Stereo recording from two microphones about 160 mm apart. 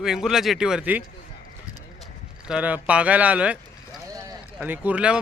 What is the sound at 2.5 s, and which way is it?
Speech, 10° right (ahead or behind).